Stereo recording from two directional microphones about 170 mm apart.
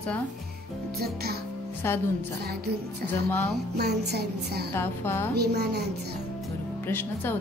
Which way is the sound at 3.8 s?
75° right (ahead or behind).